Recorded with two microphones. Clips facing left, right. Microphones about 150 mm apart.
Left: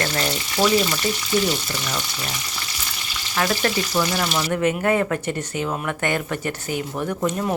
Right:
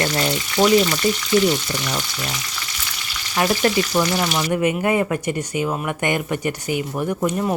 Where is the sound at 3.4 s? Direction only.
20° right (ahead or behind).